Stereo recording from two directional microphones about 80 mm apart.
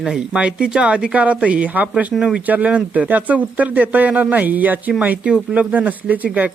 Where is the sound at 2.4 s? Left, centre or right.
Centre.